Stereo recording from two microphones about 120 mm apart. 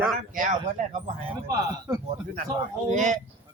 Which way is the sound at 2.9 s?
90° right.